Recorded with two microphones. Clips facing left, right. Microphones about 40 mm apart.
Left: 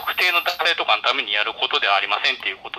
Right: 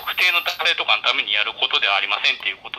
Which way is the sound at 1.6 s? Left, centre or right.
Right.